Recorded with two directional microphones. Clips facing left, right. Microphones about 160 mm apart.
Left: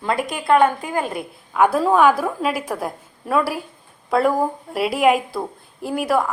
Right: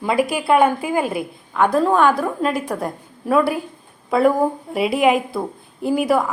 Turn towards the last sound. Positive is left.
turn(degrees=0)  # may be behind; listen again after turning